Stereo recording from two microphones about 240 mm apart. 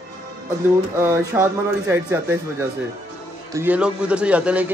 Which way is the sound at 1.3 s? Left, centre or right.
Centre.